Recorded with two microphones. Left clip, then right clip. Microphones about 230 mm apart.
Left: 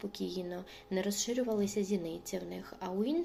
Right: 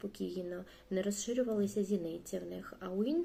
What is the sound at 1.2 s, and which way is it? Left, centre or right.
Speech, left.